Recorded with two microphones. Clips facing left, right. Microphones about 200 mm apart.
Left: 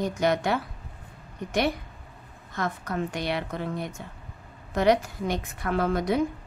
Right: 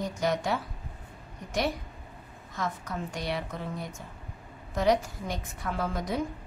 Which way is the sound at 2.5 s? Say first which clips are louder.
Left 4 dB; 65° left (ahead or behind).